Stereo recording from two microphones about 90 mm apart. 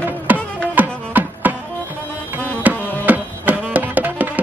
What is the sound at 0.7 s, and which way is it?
Music, 20° right (ahead or behind).